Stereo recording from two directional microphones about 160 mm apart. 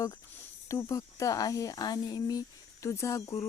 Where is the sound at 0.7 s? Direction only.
20° left (ahead or behind).